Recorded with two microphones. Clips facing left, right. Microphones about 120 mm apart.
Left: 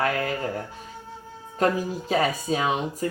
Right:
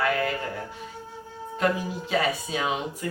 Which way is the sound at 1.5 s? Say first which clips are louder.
Left 2 dB; 40° left (ahead or behind).